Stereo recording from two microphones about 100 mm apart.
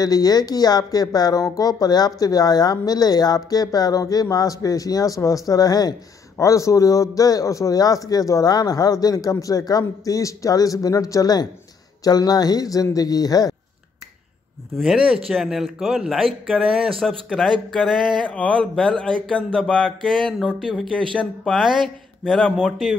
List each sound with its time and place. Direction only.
0.0 s speech: 40° left (ahead or behind)
14.8 s speech: 5° right (ahead or behind)
18.2 s speech: 10° left (ahead or behind)